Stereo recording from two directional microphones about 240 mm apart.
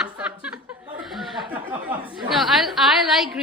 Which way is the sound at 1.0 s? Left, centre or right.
Centre.